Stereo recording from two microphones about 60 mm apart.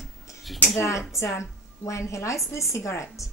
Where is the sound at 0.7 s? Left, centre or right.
Left.